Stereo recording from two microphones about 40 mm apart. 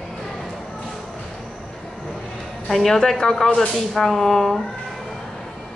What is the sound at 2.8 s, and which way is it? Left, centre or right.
Speech, centre.